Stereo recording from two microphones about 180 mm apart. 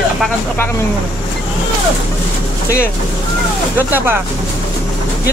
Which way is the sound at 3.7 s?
10° right (ahead or behind).